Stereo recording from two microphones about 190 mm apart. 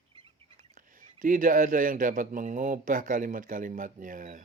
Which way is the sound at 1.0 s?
45° right (ahead or behind).